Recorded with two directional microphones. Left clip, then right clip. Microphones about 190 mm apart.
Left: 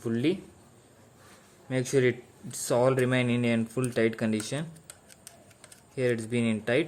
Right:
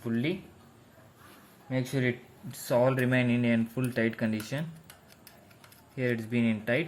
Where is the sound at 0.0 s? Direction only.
35° left (ahead or behind).